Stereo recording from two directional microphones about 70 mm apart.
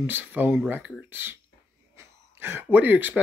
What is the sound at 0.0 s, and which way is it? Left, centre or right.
Speech, right.